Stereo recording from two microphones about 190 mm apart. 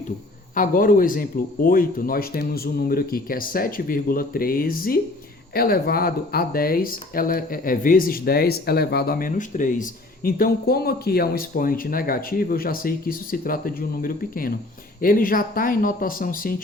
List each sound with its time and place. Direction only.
0.5 s speech: 45° left (ahead or behind)